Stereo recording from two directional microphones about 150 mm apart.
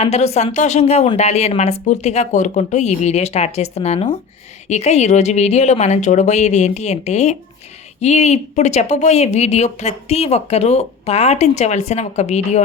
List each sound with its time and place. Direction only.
0.0 s speech: 45° left (ahead or behind)